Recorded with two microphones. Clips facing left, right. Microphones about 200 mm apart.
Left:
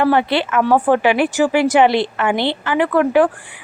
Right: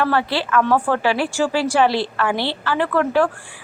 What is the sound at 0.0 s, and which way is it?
A woman's voice, 20° left (ahead or behind).